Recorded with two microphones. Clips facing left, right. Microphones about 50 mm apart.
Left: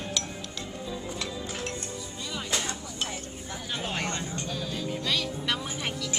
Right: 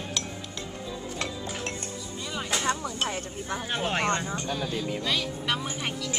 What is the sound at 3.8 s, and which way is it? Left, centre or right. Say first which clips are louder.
Speech: right 6 dB; right.